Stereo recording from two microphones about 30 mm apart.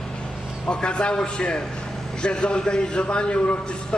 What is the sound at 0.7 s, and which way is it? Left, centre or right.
A man's voice, left.